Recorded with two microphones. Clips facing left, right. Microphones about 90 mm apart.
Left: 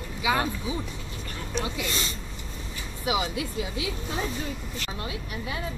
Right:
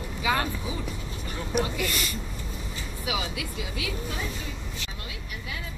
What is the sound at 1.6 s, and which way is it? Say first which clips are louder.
Speech: even; 25° left (ahead or behind).